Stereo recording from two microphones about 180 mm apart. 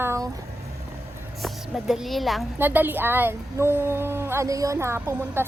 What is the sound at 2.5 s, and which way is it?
A woman's voice, 10° right (ahead or behind).